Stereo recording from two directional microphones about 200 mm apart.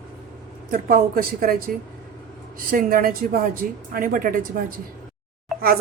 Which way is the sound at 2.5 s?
45° right (ahead or behind).